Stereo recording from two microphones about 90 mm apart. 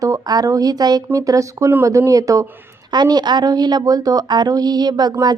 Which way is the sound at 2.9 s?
50° right (ahead or behind).